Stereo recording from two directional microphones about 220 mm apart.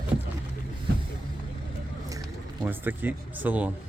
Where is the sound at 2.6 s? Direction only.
10° right (ahead or behind).